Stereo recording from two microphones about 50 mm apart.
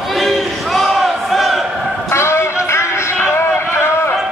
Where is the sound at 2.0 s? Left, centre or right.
Left.